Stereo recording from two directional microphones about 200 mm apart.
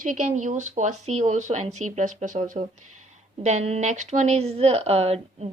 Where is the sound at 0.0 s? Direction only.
40° right (ahead or behind).